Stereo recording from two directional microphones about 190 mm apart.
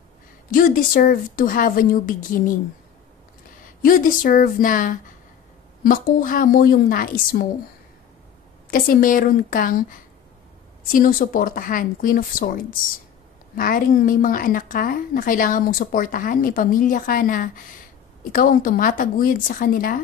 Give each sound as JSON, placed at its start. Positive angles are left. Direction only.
{"t": 0.5, "sound": "a woman's voice", "side_deg": 45}
{"t": 3.8, "sound": "a woman's voice", "side_deg": 45}
{"t": 8.6, "sound": "a woman's voice", "side_deg": 50}